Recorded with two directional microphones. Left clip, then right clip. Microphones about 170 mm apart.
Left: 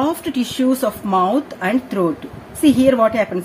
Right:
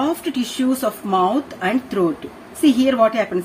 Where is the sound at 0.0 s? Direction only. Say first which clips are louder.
Left 1 dB; 40° left (ahead or behind).